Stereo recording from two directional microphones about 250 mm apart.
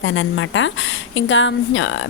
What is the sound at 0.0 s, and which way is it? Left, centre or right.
A woman's voice, left.